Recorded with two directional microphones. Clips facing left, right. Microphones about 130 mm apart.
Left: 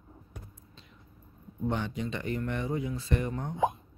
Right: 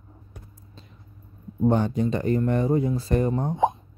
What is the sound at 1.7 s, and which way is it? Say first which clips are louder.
Speech: right 10 dB; 40° right (ahead or behind).